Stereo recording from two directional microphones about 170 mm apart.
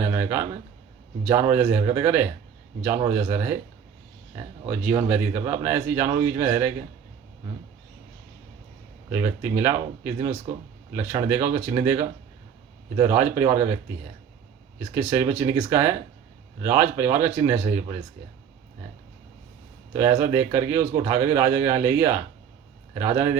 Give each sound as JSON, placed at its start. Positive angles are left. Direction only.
{"t": 0.0, "sound": "a sound", "side_deg": -15}
{"t": 1.2, "sound": "a man's voice", "side_deg": -15}
{"t": 4.7, "sound": "a man's voice", "side_deg": -10}
{"t": 9.1, "sound": "a man's voice", "side_deg": -15}
{"t": 13.0, "sound": "a man's voice", "side_deg": -15}
{"t": 14.9, "sound": "a man's voice", "side_deg": -15}
{"t": 19.9, "sound": "a man's voice", "side_deg": -15}